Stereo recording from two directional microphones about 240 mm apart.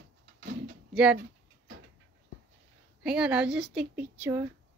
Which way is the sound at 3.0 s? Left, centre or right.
Centre.